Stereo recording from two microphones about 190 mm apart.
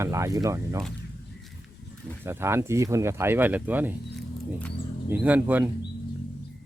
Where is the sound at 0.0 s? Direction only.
15° right (ahead or behind).